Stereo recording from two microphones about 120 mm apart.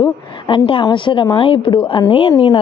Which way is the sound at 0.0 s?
45° left (ahead or behind).